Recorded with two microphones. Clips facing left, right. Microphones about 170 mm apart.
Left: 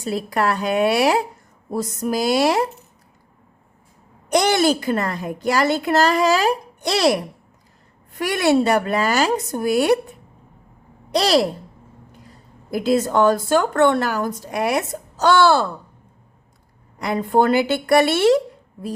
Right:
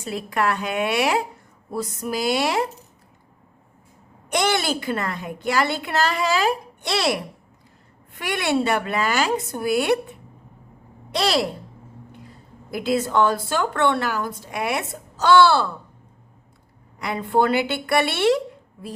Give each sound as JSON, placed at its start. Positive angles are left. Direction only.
{"t": 0.0, "sound": "a woman's voice", "side_deg": 35}
{"t": 4.3, "sound": "a woman's voice", "side_deg": 40}
{"t": 12.7, "sound": "a woman's voice", "side_deg": 40}
{"t": 17.0, "sound": "a woman's voice", "side_deg": 40}